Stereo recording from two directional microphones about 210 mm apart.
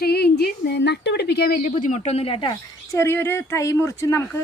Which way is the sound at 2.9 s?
10° left (ahead or behind).